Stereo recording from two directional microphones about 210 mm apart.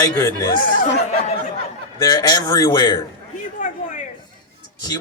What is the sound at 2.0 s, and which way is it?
Speech, 20° left (ahead or behind).